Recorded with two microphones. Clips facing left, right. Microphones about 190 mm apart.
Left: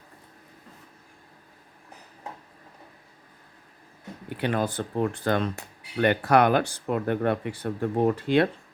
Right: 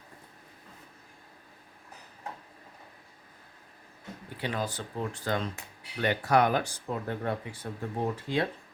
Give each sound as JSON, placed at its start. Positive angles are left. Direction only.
{"t": 4.4, "sound": "speech", "side_deg": 60}